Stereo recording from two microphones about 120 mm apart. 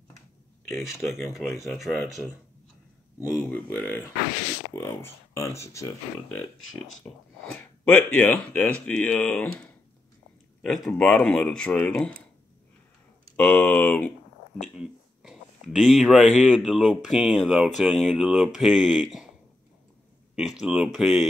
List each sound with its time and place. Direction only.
0.7 s speech: centre (ahead or behind)
3.3 s speech: 15° left (ahead or behind)
7.0 s speech: 20° left (ahead or behind)
11.0 s speech: 10° left (ahead or behind)
13.4 s speech: 10° left (ahead or behind)
14.6 s speech: 5° right (ahead or behind)
20.3 s speech: 5° right (ahead or behind)